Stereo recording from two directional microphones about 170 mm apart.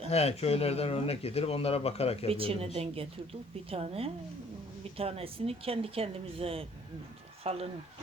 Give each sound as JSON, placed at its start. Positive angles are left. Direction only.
{"t": 0.1, "sound": "speech", "side_deg": 40}
{"t": 2.3, "sound": "speech", "side_deg": -35}